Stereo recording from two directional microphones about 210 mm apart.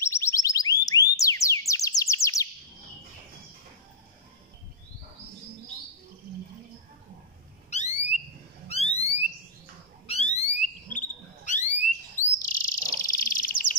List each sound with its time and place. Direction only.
0.0 s music: 15° left (ahead or behind)
7.7 s alarm: 35° left (ahead or behind)
10.9 s a sound: 35° left (ahead or behind)
12.4 s bird: 40° left (ahead or behind)